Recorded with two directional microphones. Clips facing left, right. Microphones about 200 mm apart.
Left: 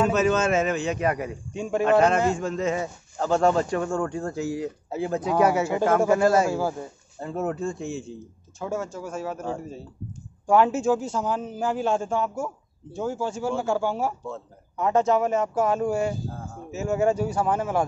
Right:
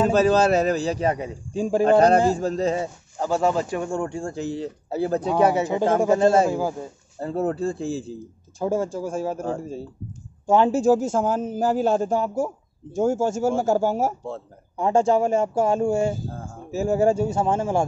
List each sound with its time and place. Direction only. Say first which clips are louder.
0.0 s a man's voice: right 4 dB; 35° right (ahead or behind)
3.2 s speech: left 1 dB; 5° right (ahead or behind)
3.7 s speech: even; 15° right (ahead or behind); by 5.3 s 35° right (ahead or behind)
5.5 s speech: right 1 dB; 20° right (ahead or behind)
7.2 s a man's voice: right 4 dB; 35° right (ahead or behind)